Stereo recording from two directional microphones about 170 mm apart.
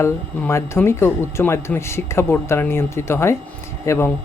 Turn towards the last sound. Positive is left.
turn(degrees=15)  # may be behind; listen again after turning